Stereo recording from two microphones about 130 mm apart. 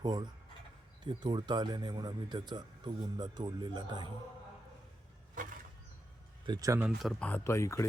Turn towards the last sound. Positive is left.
turn(degrees=20)  # may be behind; listen again after turning